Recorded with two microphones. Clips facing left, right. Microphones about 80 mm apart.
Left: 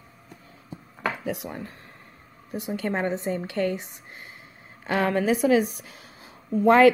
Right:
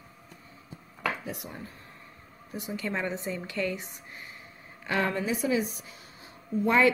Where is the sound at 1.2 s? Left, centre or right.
Left.